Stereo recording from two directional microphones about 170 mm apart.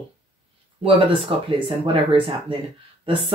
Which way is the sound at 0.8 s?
30° right (ahead or behind).